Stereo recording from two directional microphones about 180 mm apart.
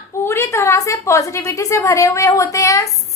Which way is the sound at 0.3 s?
15° left (ahead or behind).